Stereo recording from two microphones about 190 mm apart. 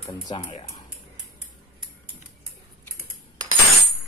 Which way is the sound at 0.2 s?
25° left (ahead or behind).